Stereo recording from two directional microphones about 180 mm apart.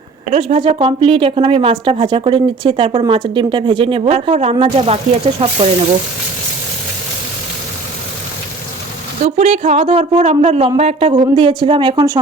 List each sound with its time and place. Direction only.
0.3 s a woman's voice: 30° right (ahead or behind)
9.2 s a woman's voice: 40° right (ahead or behind); by 12.2 s 20° right (ahead or behind)